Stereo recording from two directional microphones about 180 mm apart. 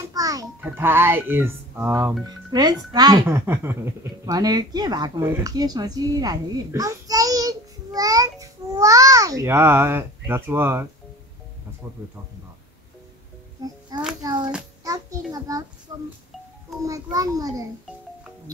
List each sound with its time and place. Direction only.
0.1 s music: 20° right (ahead or behind)
0.6 s speech: 10° right (ahead or behind)
13.6 s music: 25° right (ahead or behind)
15.3 s a child's voice: 20° right (ahead or behind)